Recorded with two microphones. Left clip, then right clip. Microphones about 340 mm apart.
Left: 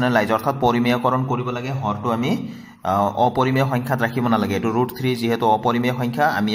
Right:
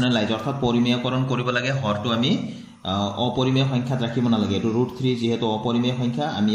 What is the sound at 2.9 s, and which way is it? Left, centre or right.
Speech, left.